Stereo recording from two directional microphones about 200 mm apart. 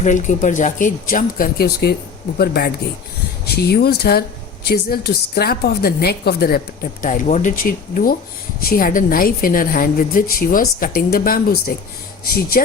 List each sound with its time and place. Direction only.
0.0 s a woman's voice: 40° left (ahead or behind)
7.0 s a woman's voice: 40° left (ahead or behind)